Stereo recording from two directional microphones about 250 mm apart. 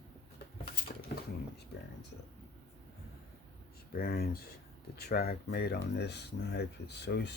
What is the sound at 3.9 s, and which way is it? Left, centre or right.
Speech, left.